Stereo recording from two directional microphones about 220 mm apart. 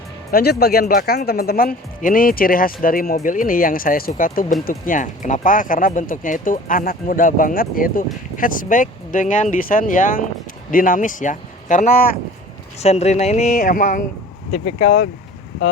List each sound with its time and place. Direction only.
0.3 s speech: 45° left (ahead or behind)
14.5 s speech: 50° left (ahead or behind)